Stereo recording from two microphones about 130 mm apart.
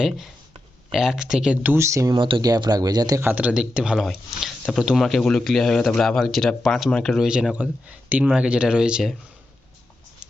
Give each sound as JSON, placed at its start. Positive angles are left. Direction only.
{"t": 0.9, "sound": "speech", "side_deg": -5}
{"t": 1.7, "sound": "speech", "side_deg": -20}
{"t": 2.1, "sound": "speech", "side_deg": -40}
{"t": 3.2, "sound": "speech", "side_deg": -15}